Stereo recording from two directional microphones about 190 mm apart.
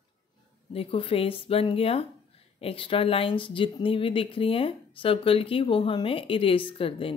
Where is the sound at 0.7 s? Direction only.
30° left (ahead or behind).